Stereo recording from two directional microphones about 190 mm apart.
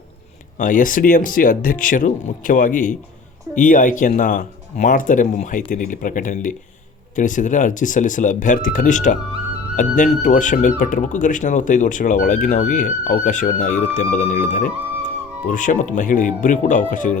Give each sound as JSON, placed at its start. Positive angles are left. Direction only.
{"t": 0.6, "sound": "speech", "side_deg": 45}